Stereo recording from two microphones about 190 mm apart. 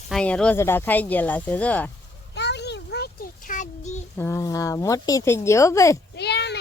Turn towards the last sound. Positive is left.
turn(degrees=60)  # may be behind; listen again after turning